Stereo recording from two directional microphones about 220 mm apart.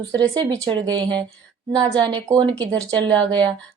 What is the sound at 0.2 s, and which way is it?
A woman's voice, 20° right (ahead or behind).